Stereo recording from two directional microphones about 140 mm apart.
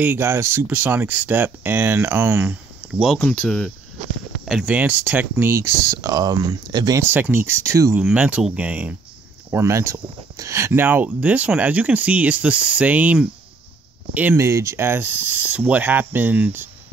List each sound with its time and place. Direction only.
0.0 s speech: 15° right (ahead or behind)
3.2 s speech: 10° left (ahead or behind)
4.5 s speech: 5° right (ahead or behind); by 7.0 s 30° right (ahead or behind)
7.0 s speech: 15° right (ahead or behind)
8.0 s speech: 10° right (ahead or behind)